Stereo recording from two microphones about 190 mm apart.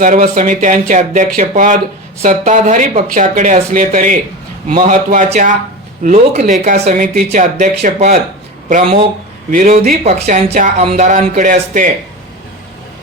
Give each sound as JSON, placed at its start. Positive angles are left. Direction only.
{"t": 0.0, "sound": "speech", "side_deg": -45}
{"t": 9.5, "sound": "speech", "side_deg": -45}